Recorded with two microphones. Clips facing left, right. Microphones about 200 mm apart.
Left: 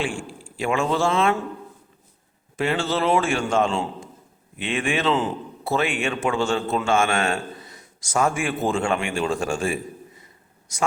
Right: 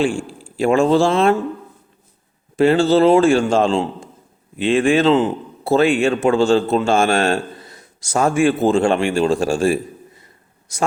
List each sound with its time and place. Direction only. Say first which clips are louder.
0.2 s speech: right 8 dB; 35° right (ahead or behind)
2.6 s a man's voice: right 10 dB; 35° right (ahead or behind)